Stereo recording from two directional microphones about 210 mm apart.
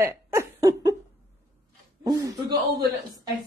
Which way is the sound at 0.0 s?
15° right (ahead or behind).